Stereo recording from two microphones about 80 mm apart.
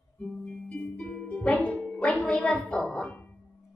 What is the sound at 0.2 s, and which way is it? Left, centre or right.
Music, centre.